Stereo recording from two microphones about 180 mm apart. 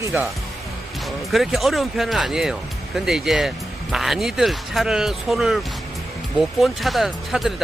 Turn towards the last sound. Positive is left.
turn(degrees=0)  # may be behind; listen again after turning